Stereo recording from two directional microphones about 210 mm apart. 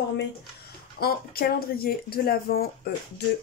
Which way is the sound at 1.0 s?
45° left (ahead or behind).